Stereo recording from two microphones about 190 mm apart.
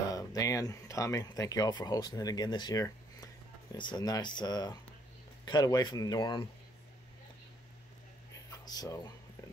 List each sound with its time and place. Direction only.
0.1 s speech: 15° left (ahead or behind)
8.5 s speech: 20° left (ahead or behind)